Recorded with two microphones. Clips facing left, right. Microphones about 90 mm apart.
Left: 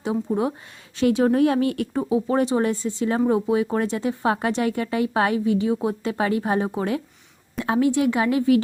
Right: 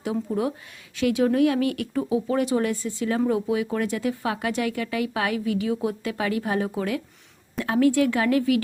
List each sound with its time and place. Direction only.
0.0 s speech: 25° left (ahead or behind)